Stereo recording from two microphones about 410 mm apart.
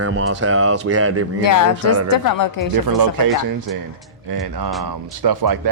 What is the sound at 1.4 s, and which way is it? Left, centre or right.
A woman's voice, left.